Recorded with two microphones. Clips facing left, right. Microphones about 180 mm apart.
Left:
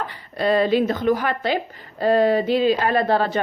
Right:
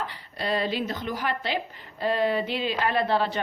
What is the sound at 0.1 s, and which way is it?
A woman's voice, 50° left (ahead or behind).